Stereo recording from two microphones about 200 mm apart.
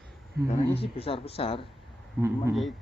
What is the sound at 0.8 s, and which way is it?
Speech, 30° left (ahead or behind).